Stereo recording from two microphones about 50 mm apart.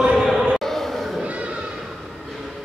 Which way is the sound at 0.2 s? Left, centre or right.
Centre.